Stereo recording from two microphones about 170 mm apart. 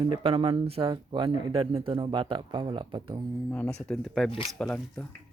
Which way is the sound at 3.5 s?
5° left (ahead or behind).